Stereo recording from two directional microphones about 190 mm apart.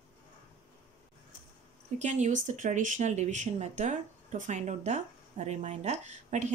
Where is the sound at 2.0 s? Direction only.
40° right (ahead or behind).